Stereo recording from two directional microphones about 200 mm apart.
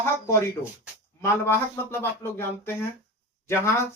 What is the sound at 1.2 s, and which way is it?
Speech, 10° left (ahead or behind).